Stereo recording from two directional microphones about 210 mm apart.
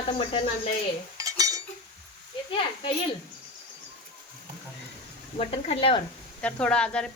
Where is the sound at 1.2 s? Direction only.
15° right (ahead or behind).